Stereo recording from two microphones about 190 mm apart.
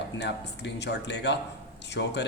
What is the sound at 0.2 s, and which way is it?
Speech, 65° left (ahead or behind).